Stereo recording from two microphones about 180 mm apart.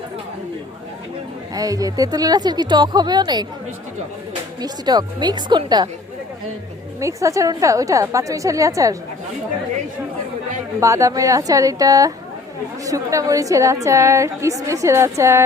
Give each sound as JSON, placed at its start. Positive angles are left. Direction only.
{"t": 1.5, "sound": "a woman's voice", "side_deg": -20}
{"t": 4.6, "sound": "a woman's voice", "side_deg": -25}
{"t": 7.0, "sound": "a woman's voice", "side_deg": -15}
{"t": 10.8, "sound": "a woman's voice", "side_deg": -15}